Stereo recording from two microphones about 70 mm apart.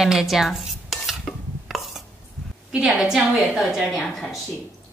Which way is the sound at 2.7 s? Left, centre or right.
Centre.